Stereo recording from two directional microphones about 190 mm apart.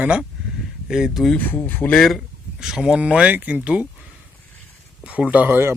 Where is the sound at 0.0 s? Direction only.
5° right (ahead or behind).